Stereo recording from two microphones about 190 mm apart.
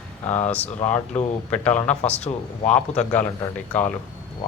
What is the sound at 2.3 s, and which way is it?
Speech, 30° left (ahead or behind).